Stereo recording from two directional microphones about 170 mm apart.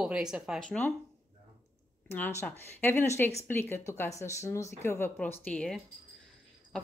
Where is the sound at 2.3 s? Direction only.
10° left (ahead or behind).